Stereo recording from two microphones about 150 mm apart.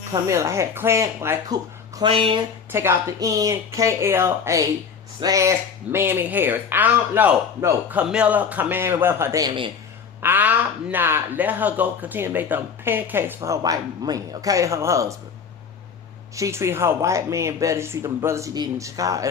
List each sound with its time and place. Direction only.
0.1 s speech: 20° right (ahead or behind)
2.0 s speech: 35° right (ahead or behind)
2.7 s speech: 20° right (ahead or behind)
16.3 s speech: 20° right (ahead or behind)